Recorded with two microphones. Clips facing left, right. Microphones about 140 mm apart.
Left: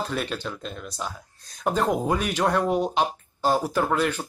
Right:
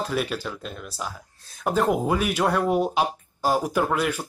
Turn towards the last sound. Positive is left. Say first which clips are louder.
# even
turn(degrees=-10)  # may be behind; listen again after turning